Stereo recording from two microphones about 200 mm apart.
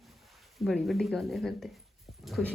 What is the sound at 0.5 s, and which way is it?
A man's voice, centre (ahead or behind).